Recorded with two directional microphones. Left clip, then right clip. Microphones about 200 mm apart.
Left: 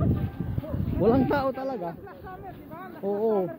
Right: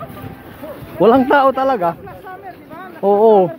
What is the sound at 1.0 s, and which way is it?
Speech, 25° right (ahead or behind).